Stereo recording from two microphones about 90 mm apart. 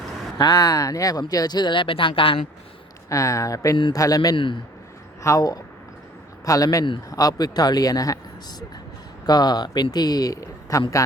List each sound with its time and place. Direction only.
0.6 s speech: 40° left (ahead or behind); by 2.4 s 75° left (ahead or behind)
3.1 s speech: 35° left (ahead or behind)
4.4 s speech: 70° left (ahead or behind)
5.2 s a man's voice: 40° left (ahead or behind)